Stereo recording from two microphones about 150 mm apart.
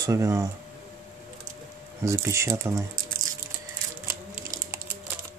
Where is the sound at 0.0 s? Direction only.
20° right (ahead or behind).